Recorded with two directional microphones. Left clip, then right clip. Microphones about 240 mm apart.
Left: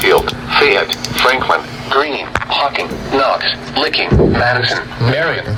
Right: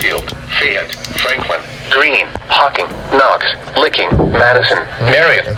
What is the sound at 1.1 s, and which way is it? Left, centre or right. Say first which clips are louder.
A man's voice: left 2 dB; left.